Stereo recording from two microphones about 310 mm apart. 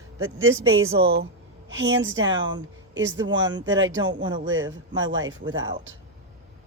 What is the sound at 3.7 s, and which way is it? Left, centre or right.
Speech, right.